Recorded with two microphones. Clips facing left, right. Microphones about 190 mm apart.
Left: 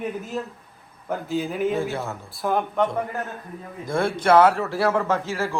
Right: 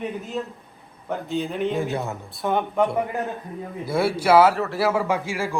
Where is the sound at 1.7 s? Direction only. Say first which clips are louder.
Even; 15° right (ahead or behind).